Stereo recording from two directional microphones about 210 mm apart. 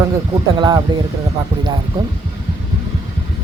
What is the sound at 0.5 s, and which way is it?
Speech, 20° right (ahead or behind).